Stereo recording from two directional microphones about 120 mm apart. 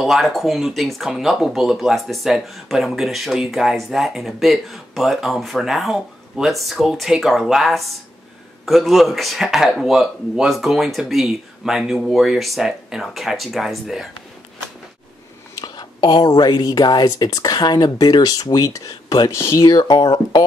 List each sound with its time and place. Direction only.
0.0 s speech: centre (ahead or behind)
15.6 s speech: 35° left (ahead or behind)